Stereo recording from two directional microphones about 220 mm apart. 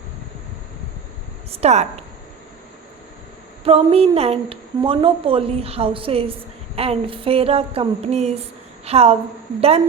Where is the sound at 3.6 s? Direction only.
25° right (ahead or behind).